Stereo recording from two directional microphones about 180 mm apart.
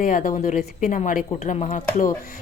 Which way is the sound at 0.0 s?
50° left (ahead or behind).